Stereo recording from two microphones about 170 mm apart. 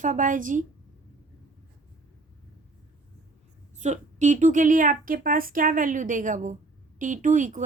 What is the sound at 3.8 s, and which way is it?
Speech, 45° right (ahead or behind).